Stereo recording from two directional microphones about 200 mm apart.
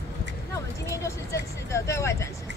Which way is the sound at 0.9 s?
15° left (ahead or behind).